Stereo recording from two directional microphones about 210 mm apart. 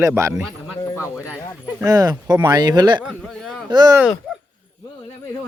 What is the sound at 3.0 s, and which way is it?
Speech, centre (ahead or behind).